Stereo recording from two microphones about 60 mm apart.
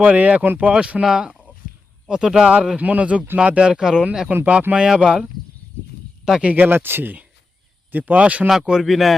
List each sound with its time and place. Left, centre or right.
0.0 s speech: right
2.6 s speech: right
4.3 s speech: right
6.4 s speech: right
8.4 s speech: centre